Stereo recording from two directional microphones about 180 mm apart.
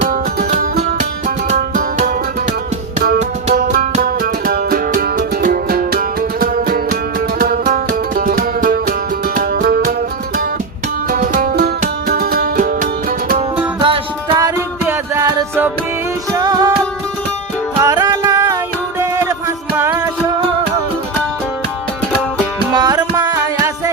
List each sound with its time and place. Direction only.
0.0 s music: 45° right (ahead or behind)
3.2 s music: 50° right (ahead or behind)
11.1 s music: 50° right (ahead or behind)
13.8 s music: 30° right (ahead or behind)
17.7 s music: 20° right (ahead or behind)
22.7 s music: 20° right (ahead or behind)